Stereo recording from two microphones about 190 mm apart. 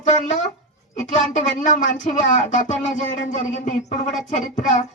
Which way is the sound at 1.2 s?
40° left (ahead or behind).